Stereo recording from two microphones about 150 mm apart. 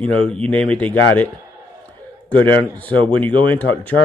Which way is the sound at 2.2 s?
10° left (ahead or behind).